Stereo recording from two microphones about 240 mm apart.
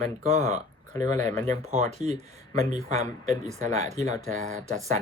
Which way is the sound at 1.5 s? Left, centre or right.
Right.